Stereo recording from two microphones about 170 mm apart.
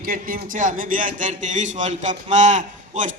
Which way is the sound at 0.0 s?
60° right (ahead or behind).